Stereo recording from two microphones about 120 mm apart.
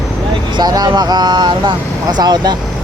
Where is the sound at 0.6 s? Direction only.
35° right (ahead or behind).